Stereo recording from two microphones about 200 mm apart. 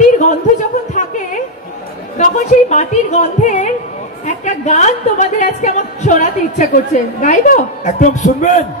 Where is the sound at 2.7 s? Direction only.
35° left (ahead or behind).